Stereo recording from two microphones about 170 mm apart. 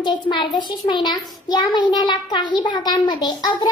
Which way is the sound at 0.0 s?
25° left (ahead or behind).